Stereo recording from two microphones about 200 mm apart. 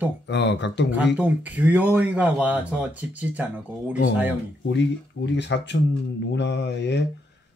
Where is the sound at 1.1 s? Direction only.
5° right (ahead or behind).